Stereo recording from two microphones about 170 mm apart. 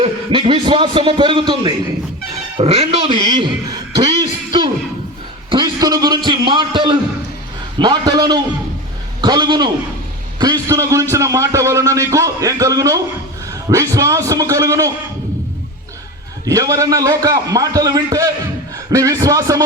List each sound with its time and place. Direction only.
0.0 s a man's voice: 30° right (ahead or behind)
4.2 s a sound: 25° right (ahead or behind)
7.8 s a man's voice: 25° right (ahead or behind)
16.5 s a man's voice: 20° right (ahead or behind)